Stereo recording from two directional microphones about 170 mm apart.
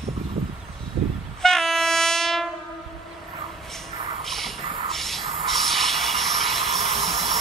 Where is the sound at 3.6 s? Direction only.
Centre (ahead or behind).